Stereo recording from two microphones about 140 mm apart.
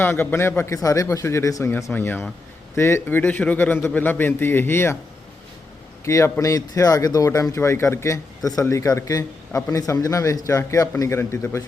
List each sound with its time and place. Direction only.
0.0 s a man's voice: 15° left (ahead or behind)
6.1 s a man's voice: 20° left (ahead or behind)